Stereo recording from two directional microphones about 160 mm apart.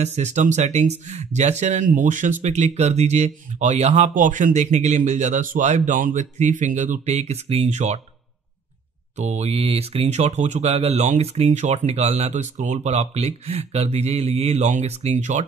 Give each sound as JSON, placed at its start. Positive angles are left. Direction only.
{"t": 0.0, "sound": "speech", "side_deg": -45}
{"t": 9.2, "sound": "speech", "side_deg": -45}